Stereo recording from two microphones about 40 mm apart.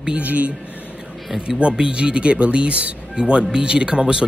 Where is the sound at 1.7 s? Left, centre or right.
Right.